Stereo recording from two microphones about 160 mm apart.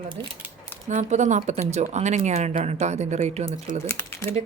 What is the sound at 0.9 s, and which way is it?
Speech, 50° right (ahead or behind).